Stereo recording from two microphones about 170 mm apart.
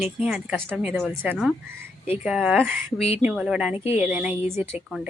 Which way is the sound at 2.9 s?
35° left (ahead or behind).